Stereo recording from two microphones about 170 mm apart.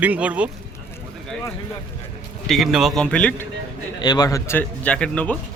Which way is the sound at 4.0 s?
25° left (ahead or behind).